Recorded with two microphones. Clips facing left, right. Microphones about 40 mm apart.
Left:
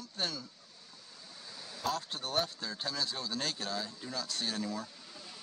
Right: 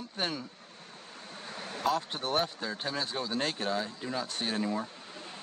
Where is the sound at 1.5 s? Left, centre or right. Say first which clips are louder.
Right 8 dB; right.